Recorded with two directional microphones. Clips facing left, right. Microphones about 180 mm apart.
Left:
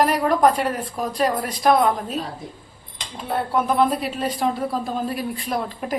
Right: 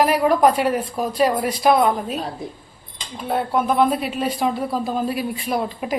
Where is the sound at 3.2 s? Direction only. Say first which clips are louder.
Right 2 dB; centre (ahead or behind).